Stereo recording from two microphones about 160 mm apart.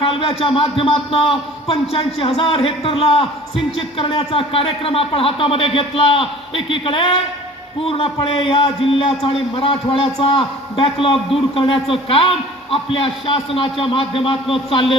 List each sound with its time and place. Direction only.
0.0 s a man's voice: 35° left (ahead or behind)